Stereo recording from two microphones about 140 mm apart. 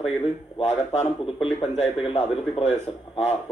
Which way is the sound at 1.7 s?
45° left (ahead or behind).